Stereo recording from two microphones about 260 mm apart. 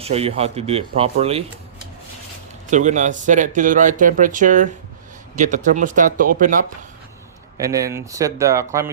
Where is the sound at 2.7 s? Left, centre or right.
Right.